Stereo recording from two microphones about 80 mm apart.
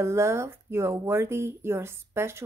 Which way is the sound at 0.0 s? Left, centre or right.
Right.